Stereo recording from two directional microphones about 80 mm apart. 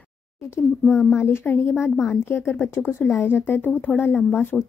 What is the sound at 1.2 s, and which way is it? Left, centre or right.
A woman's voice, left.